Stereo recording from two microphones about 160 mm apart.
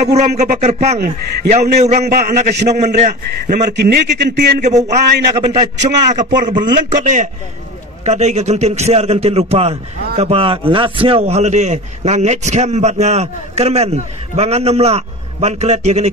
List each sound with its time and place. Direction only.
0.0 s a man's voice: 45° right (ahead or behind)
3.7 s a man's voice: 90° right
4.6 s a man's voice: 45° right (ahead or behind)